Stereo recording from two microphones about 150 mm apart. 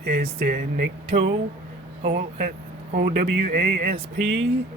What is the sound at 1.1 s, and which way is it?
Speech, 40° right (ahead or behind).